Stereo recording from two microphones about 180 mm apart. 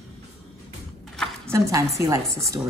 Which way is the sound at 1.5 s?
15° right (ahead or behind).